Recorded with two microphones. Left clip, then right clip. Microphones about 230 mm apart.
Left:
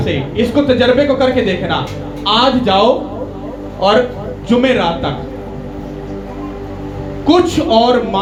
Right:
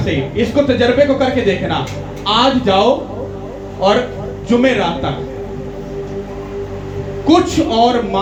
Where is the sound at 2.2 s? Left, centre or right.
Left.